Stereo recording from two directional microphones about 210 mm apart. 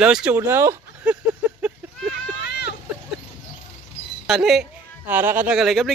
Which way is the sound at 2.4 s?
50° left (ahead or behind).